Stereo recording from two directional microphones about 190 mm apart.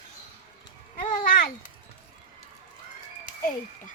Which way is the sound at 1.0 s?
45° left (ahead or behind).